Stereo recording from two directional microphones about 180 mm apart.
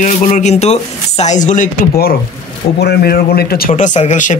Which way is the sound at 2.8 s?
60° left (ahead or behind).